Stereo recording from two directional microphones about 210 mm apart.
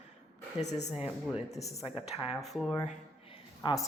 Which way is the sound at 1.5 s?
15° left (ahead or behind).